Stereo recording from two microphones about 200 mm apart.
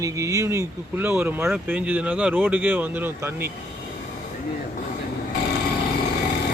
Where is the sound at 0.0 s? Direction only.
15° right (ahead or behind).